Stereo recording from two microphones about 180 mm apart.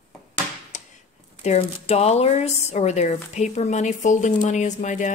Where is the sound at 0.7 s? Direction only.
45° left (ahead or behind).